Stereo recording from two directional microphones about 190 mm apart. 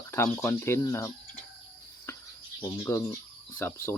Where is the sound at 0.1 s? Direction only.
15° left (ahead or behind).